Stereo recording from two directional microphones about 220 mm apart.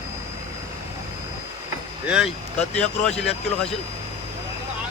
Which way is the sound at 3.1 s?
30° left (ahead or behind).